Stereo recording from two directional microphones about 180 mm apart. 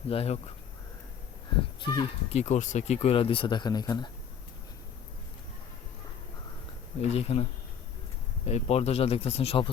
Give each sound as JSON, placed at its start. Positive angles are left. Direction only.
{"t": 0.1, "sound": "speech", "side_deg": 35}
{"t": 1.8, "sound": "speech", "side_deg": 20}
{"t": 2.3, "sound": "speech", "side_deg": 40}
{"t": 7.0, "sound": "speech", "side_deg": 35}
{"t": 8.4, "sound": "speech", "side_deg": 40}